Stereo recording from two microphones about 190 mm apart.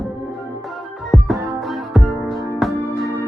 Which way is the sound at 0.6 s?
Centre (ahead or behind).